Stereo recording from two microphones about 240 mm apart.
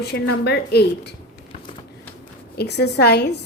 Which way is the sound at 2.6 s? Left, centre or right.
Left.